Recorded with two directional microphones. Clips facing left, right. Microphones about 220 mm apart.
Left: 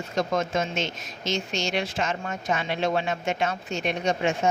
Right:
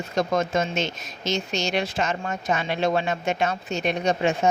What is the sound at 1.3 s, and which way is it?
Speech, 40° right (ahead or behind).